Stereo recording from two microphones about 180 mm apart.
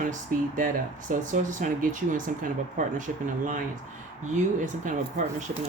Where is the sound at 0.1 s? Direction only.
45° right (ahead or behind).